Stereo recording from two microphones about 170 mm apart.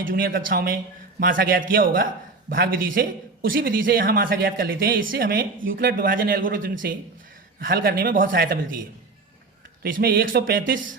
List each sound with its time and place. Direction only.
0.1 s a man's voice: 55° right (ahead or behind)
8.3 s a man's voice: 75° right (ahead or behind); by 8.8 s 60° right (ahead or behind)
9.8 s a man's voice: 60° right (ahead or behind)